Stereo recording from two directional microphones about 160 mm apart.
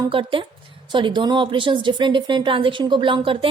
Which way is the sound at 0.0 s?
35° right (ahead or behind).